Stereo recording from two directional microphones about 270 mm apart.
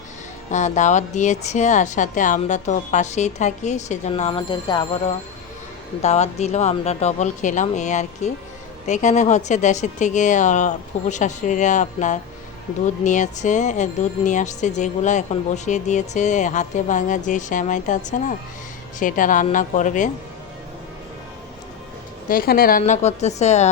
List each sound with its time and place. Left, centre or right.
0.5 s speech: left
22.3 s speech: left